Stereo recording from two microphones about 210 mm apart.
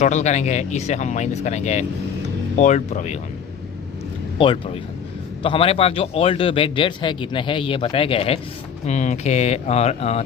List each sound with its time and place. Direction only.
0.0 s speech: 35° left (ahead or behind)
4.4 s a man's voice: 25° left (ahead or behind)